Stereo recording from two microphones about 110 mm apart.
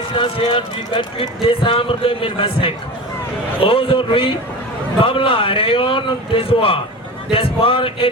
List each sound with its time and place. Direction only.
0.2 s a man's voice: 50° left (ahead or behind)